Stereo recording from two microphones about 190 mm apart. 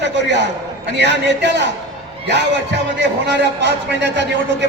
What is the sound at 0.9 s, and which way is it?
Speech, 65° right (ahead or behind).